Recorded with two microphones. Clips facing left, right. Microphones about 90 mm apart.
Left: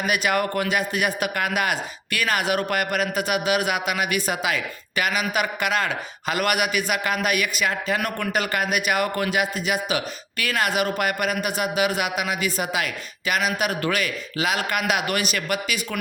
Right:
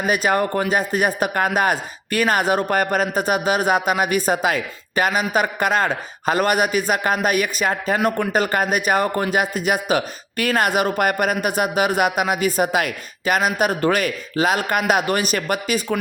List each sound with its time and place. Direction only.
0.0 s a man's voice: 35° right (ahead or behind)
7.9 s a man's voice: 30° right (ahead or behind)
9.4 s speech: 45° right (ahead or behind)